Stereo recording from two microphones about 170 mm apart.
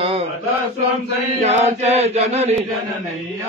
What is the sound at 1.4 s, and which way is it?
Chant, 40° right (ahead or behind).